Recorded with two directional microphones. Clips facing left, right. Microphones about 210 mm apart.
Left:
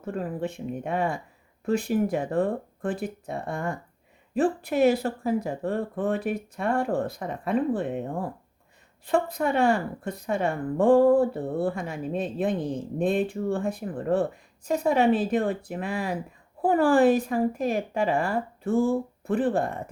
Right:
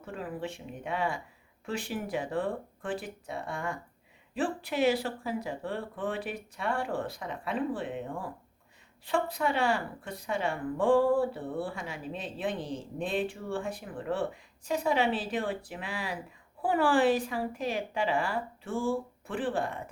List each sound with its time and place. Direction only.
0.0 s speech: 45° left (ahead or behind)